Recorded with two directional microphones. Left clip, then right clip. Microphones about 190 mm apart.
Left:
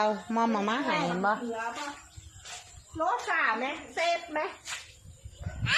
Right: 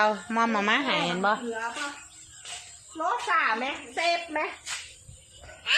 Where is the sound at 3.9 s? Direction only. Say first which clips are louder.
Right 2 dB; 35° right (ahead or behind).